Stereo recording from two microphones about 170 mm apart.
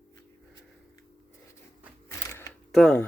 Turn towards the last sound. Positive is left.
turn(degrees=5)  # may be behind; listen again after turning